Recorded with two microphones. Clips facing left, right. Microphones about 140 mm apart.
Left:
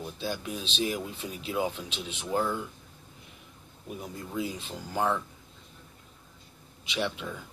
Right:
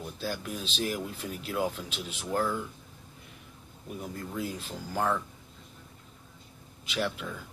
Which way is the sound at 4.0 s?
10° left (ahead or behind).